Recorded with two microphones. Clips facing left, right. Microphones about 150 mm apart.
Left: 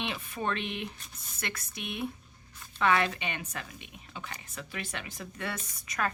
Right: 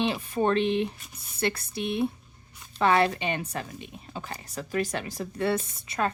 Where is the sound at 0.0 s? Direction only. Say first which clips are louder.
Right 9 dB; 35° right (ahead or behind).